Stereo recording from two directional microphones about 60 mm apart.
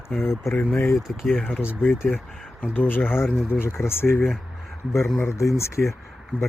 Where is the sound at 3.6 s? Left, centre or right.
Left.